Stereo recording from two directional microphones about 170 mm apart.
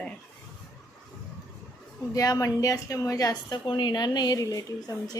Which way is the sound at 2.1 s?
20° left (ahead or behind).